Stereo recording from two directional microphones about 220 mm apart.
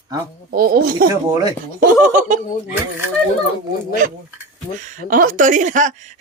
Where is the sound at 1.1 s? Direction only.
15° right (ahead or behind).